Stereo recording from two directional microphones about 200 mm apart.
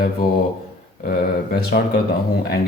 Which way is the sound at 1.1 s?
50° left (ahead or behind).